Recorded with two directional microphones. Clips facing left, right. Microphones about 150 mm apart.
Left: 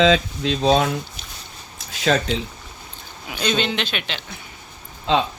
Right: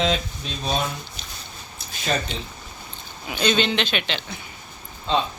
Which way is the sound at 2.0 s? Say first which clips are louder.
Left 6 dB; 85° left.